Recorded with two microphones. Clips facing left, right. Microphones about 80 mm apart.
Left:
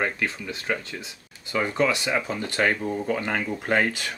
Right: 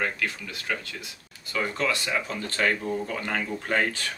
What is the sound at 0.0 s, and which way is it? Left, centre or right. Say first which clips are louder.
Speech: left 2 dB; left.